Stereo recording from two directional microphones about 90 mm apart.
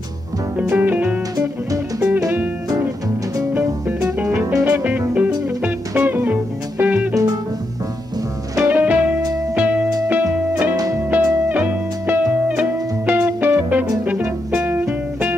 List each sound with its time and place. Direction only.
0.6 s music: 20° right (ahead or behind)
1.3 s music: 40° right (ahead or behind)
4.6 s music: 20° right (ahead or behind)
8.6 s music: 20° right (ahead or behind)